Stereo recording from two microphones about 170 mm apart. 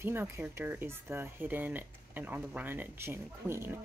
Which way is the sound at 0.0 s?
15° right (ahead or behind).